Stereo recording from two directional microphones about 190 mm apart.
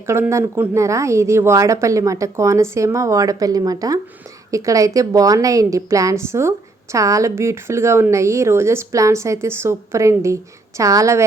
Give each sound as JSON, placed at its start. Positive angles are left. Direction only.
{"t": 0.1, "sound": "a woman's voice", "side_deg": -15}